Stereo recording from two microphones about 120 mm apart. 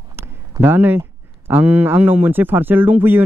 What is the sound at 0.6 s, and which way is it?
Speech, 15° right (ahead or behind).